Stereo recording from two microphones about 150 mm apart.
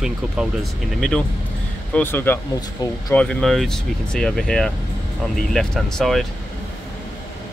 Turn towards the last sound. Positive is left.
turn(degrees=0)  # may be behind; listen again after turning